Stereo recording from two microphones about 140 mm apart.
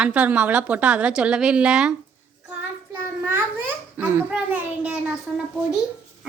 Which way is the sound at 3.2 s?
15° right (ahead or behind).